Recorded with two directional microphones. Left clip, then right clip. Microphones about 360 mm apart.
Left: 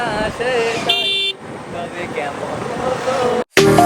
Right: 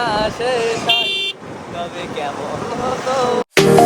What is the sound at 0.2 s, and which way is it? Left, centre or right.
Vehicle, left.